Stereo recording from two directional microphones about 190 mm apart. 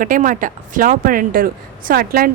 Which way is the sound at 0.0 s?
45° right (ahead or behind).